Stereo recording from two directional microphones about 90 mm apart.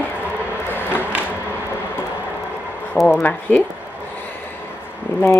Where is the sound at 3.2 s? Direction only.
20° left (ahead or behind).